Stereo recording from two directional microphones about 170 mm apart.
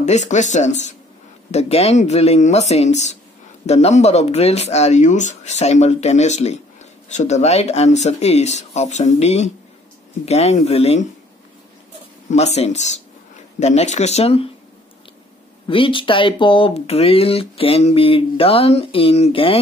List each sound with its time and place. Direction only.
0.0 s speech: 40° left (ahead or behind)
12.3 s speech: 40° left (ahead or behind)
15.6 s speech: 30° left (ahead or behind)